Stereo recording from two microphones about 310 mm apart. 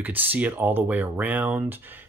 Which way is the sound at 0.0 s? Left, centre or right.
Centre.